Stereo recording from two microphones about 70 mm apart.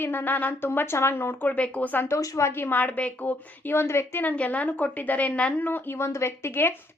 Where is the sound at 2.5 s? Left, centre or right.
Left.